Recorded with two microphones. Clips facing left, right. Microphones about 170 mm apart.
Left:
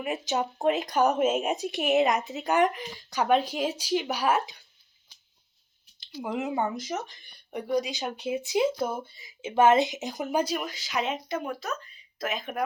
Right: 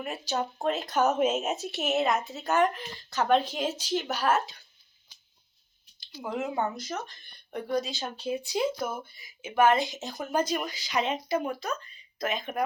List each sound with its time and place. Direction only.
0.0 s speech: 15° left (ahead or behind)
6.0 s speech: 15° left (ahead or behind)